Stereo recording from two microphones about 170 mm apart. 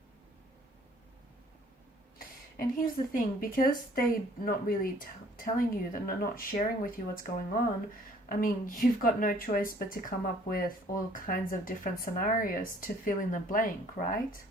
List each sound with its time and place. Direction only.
2.1 s speech: 55° left (ahead or behind)
8.3 s speech: 55° left (ahead or behind)